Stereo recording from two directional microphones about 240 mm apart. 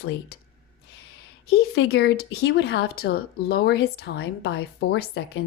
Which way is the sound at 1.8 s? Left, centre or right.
Left.